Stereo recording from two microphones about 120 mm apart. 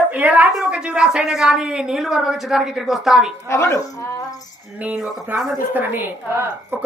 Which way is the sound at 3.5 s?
25° left (ahead or behind).